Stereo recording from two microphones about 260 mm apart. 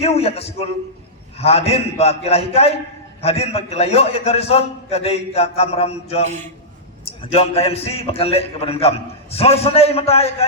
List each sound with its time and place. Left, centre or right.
0.0 s a man's voice: left